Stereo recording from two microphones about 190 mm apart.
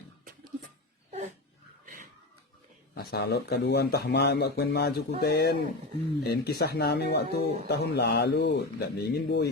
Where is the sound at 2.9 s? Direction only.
55° left (ahead or behind).